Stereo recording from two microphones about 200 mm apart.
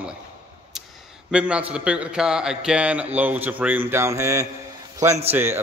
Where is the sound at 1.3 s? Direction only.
5° right (ahead or behind).